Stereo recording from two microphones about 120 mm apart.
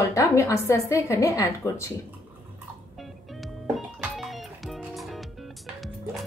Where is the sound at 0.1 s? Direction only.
25° left (ahead or behind).